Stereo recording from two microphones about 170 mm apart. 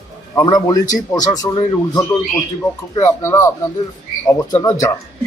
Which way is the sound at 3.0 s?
15° left (ahead or behind).